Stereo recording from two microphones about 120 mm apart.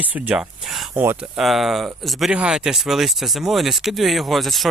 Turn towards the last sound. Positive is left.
turn(degrees=0)  # may be behind; listen again after turning